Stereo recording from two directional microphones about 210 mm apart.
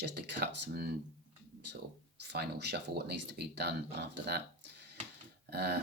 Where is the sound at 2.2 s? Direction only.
50° right (ahead or behind).